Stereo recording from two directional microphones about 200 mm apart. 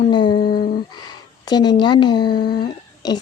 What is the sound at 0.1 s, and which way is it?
Speech, 25° left (ahead or behind).